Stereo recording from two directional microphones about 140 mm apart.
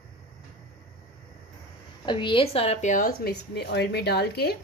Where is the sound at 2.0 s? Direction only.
35° left (ahead or behind); by 3.3 s 80° left.